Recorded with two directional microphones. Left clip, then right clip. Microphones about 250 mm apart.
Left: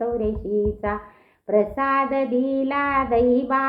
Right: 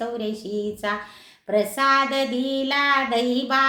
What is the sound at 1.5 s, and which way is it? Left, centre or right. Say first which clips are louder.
Child singing: right 1 dB; centre.